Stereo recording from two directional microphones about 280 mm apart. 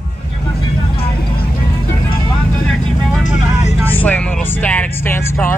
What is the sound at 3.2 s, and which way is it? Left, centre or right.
Vehicle, left.